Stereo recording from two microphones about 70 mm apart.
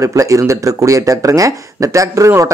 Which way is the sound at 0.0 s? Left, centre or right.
Right.